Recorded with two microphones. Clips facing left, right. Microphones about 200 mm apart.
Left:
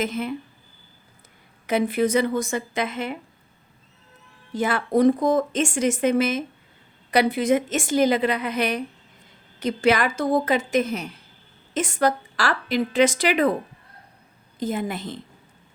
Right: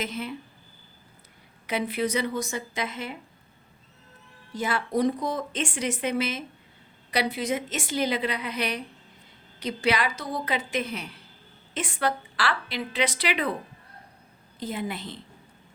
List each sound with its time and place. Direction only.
0.0 s speech: 50° left (ahead or behind)
1.6 s speech: 50° left (ahead or behind)
4.5 s speech: 55° left (ahead or behind)
14.6 s speech: 45° left (ahead or behind)